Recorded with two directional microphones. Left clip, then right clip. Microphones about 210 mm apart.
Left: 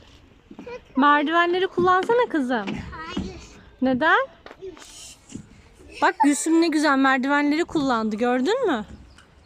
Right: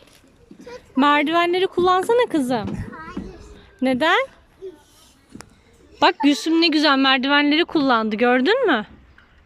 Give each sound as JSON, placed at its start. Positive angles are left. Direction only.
{"t": 0.9, "sound": "speech", "side_deg": -20}
{"t": 2.6, "sound": "music", "side_deg": 0}
{"t": 3.8, "sound": "speech", "side_deg": -20}
{"t": 6.3, "sound": "speech", "side_deg": 5}
{"t": 7.9, "sound": "speech", "side_deg": -10}